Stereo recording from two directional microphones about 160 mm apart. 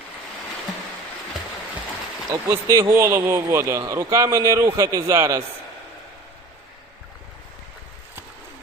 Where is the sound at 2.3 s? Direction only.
20° right (ahead or behind).